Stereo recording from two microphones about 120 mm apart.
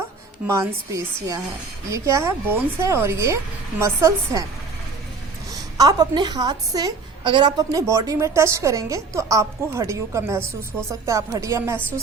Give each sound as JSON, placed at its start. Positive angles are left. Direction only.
{"t": 0.4, "sound": "a woman's voice", "side_deg": -25}
{"t": 5.7, "sound": "a woman's voice", "side_deg": -30}